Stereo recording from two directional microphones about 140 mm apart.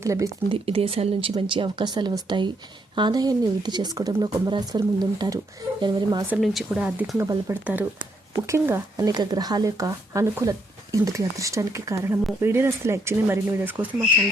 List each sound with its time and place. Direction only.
0.0 s speech: 20° right (ahead or behind)
0.4 s speech: 40° right (ahead or behind)
6.3 s speech: centre (ahead or behind)
7.2 s speech: 20° right (ahead or behind)